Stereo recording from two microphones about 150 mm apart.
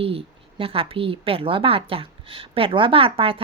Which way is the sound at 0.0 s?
40° right (ahead or behind).